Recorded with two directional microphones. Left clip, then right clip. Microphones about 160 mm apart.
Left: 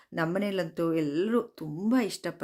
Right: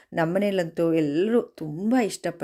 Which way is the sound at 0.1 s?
20° right (ahead or behind).